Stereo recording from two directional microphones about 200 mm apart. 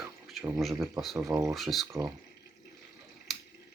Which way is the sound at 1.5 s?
Centre (ahead or behind).